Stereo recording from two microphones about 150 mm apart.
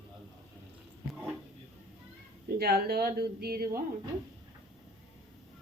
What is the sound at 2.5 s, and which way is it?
Speech, 90° right.